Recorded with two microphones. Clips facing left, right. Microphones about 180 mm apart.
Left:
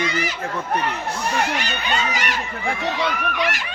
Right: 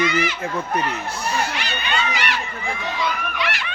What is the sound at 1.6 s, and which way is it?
Crowd, 45° left (ahead or behind).